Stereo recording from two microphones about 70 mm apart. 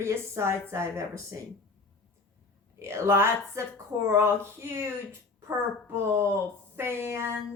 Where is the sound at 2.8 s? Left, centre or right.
Right.